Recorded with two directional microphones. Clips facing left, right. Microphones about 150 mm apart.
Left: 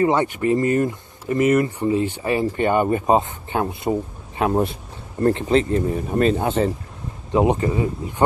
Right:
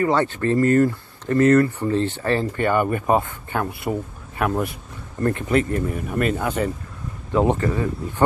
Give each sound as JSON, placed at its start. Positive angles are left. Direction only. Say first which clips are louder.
{"t": 0.0, "sound": "speech", "louder": "left 1 dB", "side_deg": 15}